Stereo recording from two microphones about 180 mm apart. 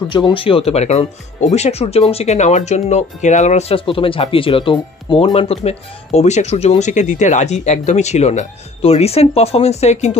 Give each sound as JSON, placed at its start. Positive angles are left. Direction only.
{"t": 0.1, "sound": "speech", "side_deg": 25}